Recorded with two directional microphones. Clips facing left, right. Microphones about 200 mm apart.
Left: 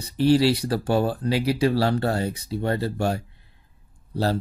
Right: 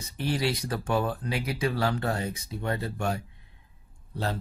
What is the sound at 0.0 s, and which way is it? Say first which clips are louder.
Speech: left 10 dB; 30° left (ahead or behind).